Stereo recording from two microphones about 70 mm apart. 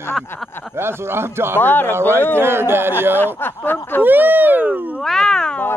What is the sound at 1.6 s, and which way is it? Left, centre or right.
Speech, left.